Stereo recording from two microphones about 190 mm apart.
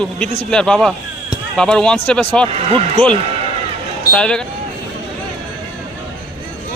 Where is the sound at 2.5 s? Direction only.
30° right (ahead or behind).